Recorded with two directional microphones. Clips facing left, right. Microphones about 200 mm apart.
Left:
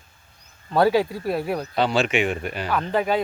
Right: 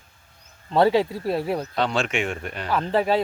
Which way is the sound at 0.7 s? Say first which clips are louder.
Even; 25° right (ahead or behind).